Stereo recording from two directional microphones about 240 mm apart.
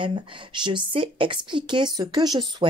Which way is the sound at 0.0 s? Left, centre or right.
Right.